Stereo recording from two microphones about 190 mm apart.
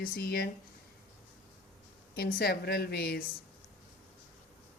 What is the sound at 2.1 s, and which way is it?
A woman's voice, 55° left (ahead or behind).